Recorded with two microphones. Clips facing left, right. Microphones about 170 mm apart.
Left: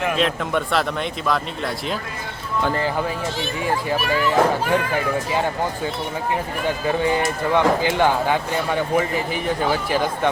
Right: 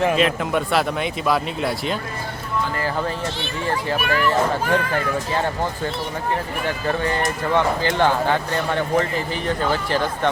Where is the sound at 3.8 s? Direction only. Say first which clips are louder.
Right 2 dB; 15° left (ahead or behind).